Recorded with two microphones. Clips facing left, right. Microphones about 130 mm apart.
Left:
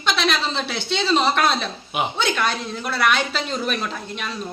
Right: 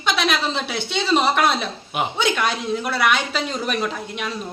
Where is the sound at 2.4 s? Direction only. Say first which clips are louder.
Right 2 dB; 10° right (ahead or behind).